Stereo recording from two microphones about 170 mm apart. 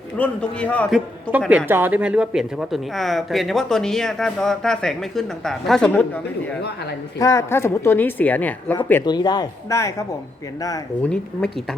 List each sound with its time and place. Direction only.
0.2 s a woman's voice: 10° left (ahead or behind)
0.9 s a man's voice: 5° right (ahead or behind)
7.2 s a woman's voice: 20° left (ahead or behind)
9.0 s speech: 25° left (ahead or behind)
11.0 s a man's voice: 5° left (ahead or behind)